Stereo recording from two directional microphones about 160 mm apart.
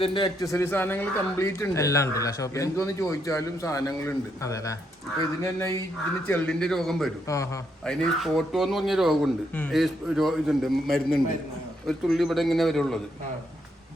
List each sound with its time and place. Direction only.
0.0 s a man's voice: 30° left (ahead or behind); by 7.1 s centre (ahead or behind)
7.3 s a man's voice: 20° left (ahead or behind)
7.9 s a man's voice: 5° left (ahead or behind)